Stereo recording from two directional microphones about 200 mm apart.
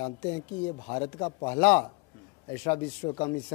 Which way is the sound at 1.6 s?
10° left (ahead or behind).